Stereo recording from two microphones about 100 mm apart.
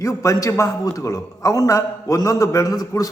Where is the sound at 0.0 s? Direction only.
30° left (ahead or behind).